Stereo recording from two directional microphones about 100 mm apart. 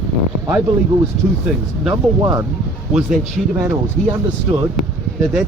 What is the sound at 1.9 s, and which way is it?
Speech, 35° right (ahead or behind).